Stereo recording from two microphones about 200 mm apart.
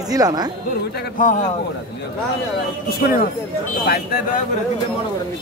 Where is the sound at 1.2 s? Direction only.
40° left (ahead or behind).